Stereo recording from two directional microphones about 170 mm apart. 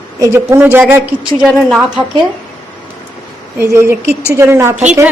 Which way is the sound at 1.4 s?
Centre (ahead or behind).